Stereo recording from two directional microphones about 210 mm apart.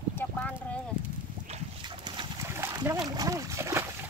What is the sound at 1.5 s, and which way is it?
Dog, 20° right (ahead or behind).